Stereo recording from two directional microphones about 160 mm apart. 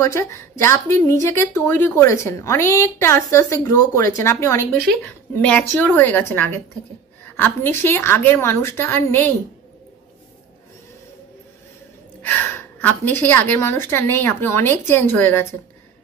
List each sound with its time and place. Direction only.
0.0 s speech: 20° left (ahead or behind)
12.2 s speech: 10° left (ahead or behind)